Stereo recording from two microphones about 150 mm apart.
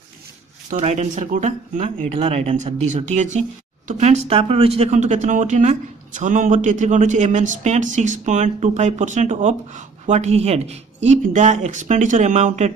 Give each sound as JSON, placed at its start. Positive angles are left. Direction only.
{"t": 0.7, "sound": "speech", "side_deg": -50}